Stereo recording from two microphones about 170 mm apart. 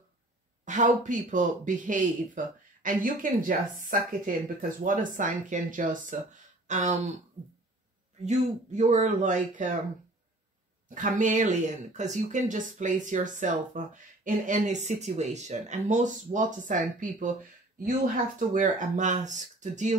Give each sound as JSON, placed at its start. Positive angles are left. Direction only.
{"t": 0.7, "sound": "speech", "side_deg": -45}
{"t": 8.3, "sound": "speech", "side_deg": -45}
{"t": 11.0, "sound": "speech", "side_deg": -50}